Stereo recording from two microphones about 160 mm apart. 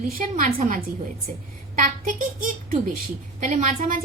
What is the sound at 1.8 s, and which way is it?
A woman's voice, 55° right (ahead or behind).